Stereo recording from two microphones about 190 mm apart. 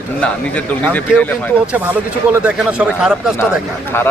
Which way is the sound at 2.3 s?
5° right (ahead or behind).